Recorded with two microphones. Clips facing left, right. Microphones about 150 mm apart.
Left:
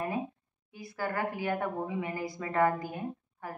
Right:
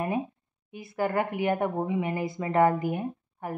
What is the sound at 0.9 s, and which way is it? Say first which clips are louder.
A woman's voice: right 6 dB; 20° right (ahead or behind).